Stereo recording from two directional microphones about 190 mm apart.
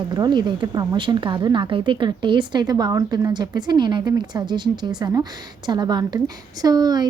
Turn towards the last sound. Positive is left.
turn(degrees=-20)  # may be behind; listen again after turning